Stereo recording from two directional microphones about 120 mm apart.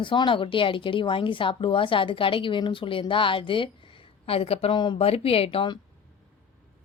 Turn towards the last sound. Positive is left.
turn(degrees=55)  # may be behind; listen again after turning